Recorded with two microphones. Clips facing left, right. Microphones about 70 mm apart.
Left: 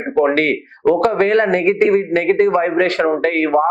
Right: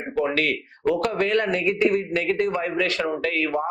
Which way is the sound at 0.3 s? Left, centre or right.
Left.